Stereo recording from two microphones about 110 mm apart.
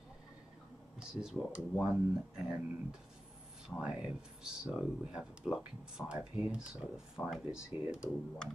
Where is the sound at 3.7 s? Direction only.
10° right (ahead or behind).